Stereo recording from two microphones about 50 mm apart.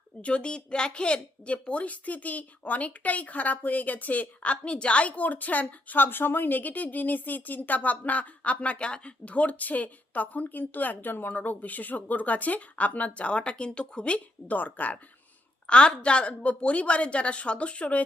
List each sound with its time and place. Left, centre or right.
0.2 s speech: left
15.6 s a woman's voice: centre